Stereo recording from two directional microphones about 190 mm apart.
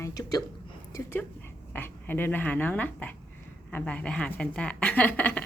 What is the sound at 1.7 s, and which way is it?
A woman's voice, 10° left (ahead or behind).